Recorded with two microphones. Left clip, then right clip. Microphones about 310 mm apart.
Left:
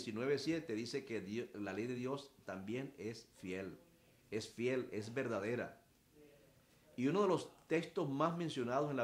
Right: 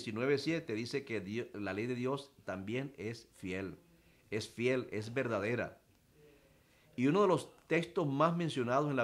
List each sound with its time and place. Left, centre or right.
0.0 s speech: right
7.0 s speech: right